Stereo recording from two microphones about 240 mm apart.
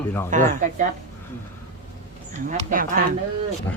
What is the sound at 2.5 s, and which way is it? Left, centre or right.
Speech, right.